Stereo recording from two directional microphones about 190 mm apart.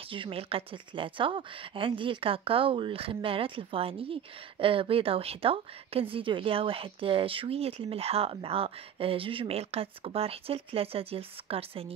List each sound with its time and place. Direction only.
0.1 s a woman's voice: 30° right (ahead or behind)